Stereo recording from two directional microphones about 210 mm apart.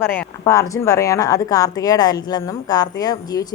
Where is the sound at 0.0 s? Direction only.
10° left (ahead or behind).